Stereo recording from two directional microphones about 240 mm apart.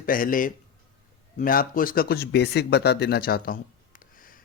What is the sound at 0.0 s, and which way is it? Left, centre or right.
Speech, left.